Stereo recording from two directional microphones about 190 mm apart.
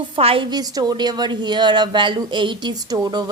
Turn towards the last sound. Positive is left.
turn(degrees=-20)  # may be behind; listen again after turning